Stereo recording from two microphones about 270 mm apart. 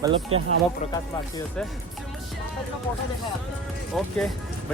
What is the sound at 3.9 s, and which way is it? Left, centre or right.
Speech, centre.